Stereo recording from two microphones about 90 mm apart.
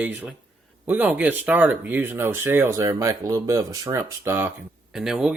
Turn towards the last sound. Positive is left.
turn(degrees=-5)  # may be behind; listen again after turning